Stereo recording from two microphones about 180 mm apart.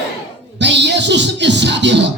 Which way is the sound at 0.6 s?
75° right (ahead or behind).